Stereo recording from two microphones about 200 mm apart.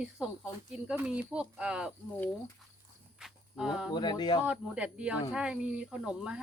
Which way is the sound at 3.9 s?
20° left (ahead or behind).